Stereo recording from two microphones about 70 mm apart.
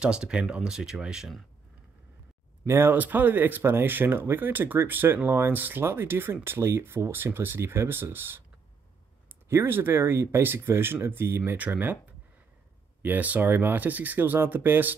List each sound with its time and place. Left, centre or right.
0.0 s speech: centre
2.6 s speech: right
9.5 s speech: right